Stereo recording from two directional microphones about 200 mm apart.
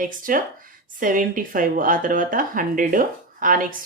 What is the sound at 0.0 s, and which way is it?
A woman's voice, 45° right (ahead or behind).